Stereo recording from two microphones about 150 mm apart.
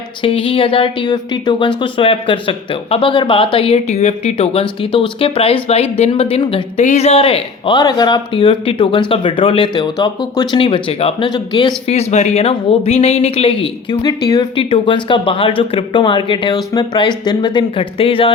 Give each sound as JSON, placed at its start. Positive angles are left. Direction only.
{"t": 0.2, "sound": "speech", "side_deg": 35}